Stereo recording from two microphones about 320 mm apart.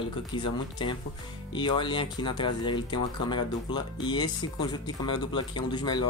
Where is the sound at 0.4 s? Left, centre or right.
Centre.